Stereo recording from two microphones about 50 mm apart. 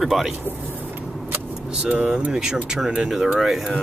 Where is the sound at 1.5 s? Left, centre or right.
Centre.